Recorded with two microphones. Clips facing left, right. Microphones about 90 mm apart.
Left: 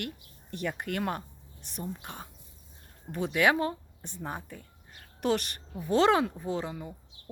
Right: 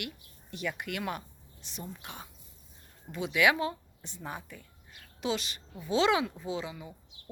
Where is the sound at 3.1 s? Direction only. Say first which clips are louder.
Left 1 dB; 45° left (ahead or behind).